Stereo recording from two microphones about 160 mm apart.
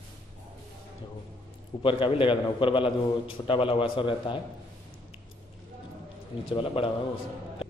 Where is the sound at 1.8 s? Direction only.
30° left (ahead or behind).